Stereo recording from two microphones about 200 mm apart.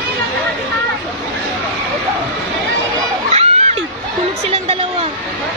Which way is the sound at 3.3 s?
35° right (ahead or behind).